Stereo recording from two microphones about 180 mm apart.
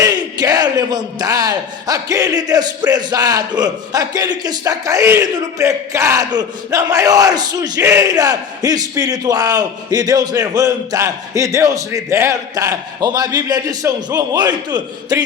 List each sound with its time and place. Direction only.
0.0 s a man's voice: 20° right (ahead or behind)